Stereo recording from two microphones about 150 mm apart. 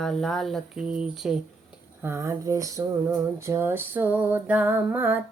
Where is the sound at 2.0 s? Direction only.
15° right (ahead or behind).